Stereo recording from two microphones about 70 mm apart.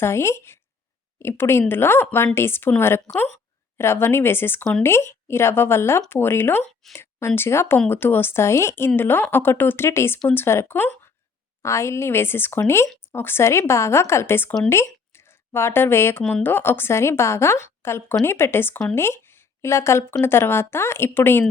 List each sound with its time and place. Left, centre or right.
0.0 s a woman's voice: left